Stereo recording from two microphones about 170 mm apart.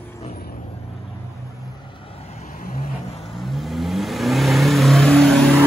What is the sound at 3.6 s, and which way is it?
Vehicle, centre (ahead or behind).